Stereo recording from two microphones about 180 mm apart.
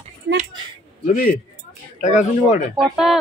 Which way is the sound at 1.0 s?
50° left (ahead or behind).